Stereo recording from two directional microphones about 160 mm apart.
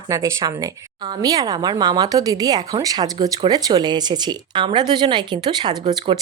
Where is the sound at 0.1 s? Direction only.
20° right (ahead or behind).